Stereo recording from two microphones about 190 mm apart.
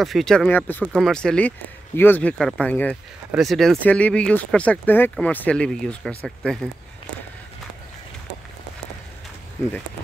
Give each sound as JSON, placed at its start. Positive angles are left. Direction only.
{"t": 0.0, "sound": "speech", "side_deg": 0}